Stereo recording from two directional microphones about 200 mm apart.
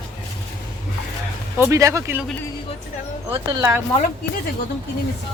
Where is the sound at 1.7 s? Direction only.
15° right (ahead or behind).